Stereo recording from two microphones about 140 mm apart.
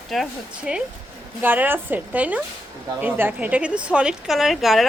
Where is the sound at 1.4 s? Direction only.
15° right (ahead or behind).